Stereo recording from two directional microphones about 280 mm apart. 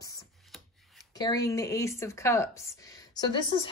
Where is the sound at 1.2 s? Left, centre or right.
Centre.